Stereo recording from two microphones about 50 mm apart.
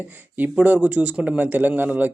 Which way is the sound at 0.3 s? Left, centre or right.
Right.